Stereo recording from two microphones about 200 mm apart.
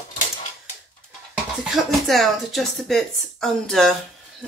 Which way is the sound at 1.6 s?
Centre (ahead or behind).